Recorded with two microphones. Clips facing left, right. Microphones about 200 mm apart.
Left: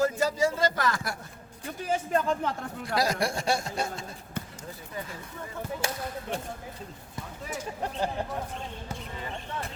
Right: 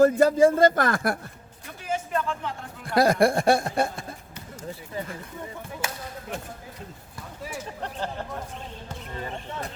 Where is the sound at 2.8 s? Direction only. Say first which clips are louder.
Right 8 dB; 55° right (ahead or behind).